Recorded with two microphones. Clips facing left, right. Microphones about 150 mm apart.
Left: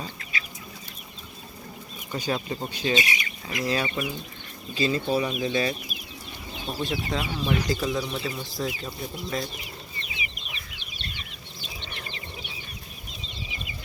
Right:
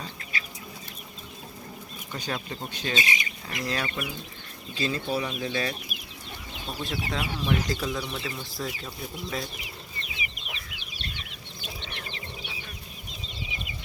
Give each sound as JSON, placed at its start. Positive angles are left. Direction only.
{"t": 2.1, "sound": "speech", "side_deg": 10}
{"t": 3.0, "sound": "speech", "side_deg": -25}
{"t": 3.6, "sound": "speech", "side_deg": 10}
{"t": 10.0, "sound": "chicken", "side_deg": -35}